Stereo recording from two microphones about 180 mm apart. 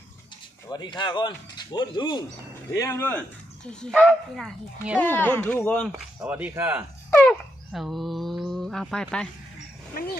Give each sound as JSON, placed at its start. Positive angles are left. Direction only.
{"t": 0.7, "sound": "speech", "side_deg": 25}
{"t": 6.1, "sound": "speech", "side_deg": -10}
{"t": 7.1, "sound": "dog", "side_deg": 5}